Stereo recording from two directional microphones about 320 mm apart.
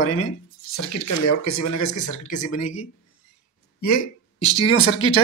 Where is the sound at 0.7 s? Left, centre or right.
Left.